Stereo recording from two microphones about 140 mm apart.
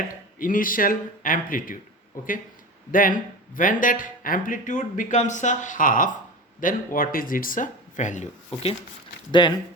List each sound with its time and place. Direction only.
0.1 s speech: 75° left (ahead or behind)
6.6 s speech: 80° left; by 8.3 s 60° left (ahead or behind)
9.4 s speech: 35° left (ahead or behind)